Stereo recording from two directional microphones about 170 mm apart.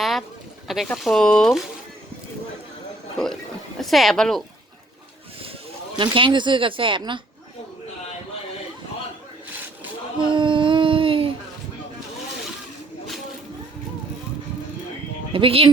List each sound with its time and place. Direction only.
0.0 s a sound: centre (ahead or behind)
0.7 s speech: centre (ahead or behind)
3.8 s speech: centre (ahead or behind)
6.0 s speech: 30° right (ahead or behind)
10.2 s a sound: 30° right (ahead or behind)
15.3 s speech: 35° right (ahead or behind)